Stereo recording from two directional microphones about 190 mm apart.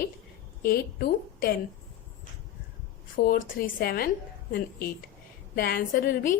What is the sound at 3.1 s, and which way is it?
Speech, 50° left (ahead or behind).